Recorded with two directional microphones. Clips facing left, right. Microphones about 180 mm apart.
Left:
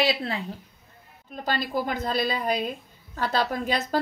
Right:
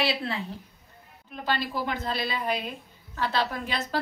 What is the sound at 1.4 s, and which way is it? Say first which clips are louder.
A woman's voice: left 2 dB; 40° left (ahead or behind).